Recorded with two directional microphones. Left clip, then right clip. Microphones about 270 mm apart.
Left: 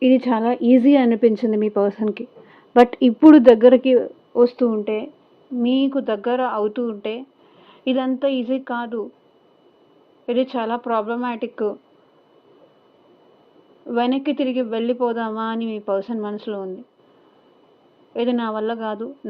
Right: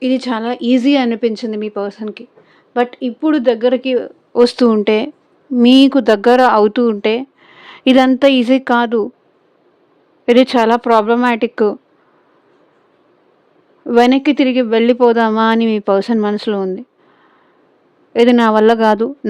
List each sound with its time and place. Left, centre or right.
0.0 s a woman's voice: centre
4.3 s speech: right
10.2 s speech: right
13.8 s speech: right
18.1 s speech: right